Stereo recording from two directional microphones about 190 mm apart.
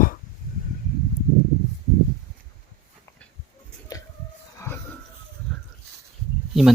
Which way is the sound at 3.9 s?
20° left (ahead or behind).